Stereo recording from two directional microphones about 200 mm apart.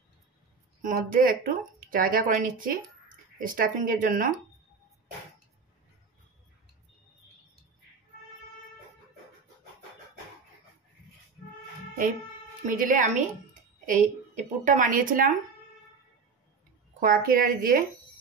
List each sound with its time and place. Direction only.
0.8 s speech: 45° right (ahead or behind)
12.6 s a woman's voice: 45° right (ahead or behind)
17.0 s speech: 45° right (ahead or behind)